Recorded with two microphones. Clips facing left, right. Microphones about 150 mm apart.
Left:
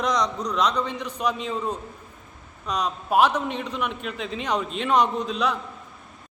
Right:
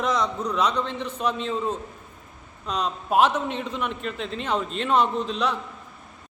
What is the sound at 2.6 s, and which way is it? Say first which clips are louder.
A man's voice: even; 10° left (ahead or behind).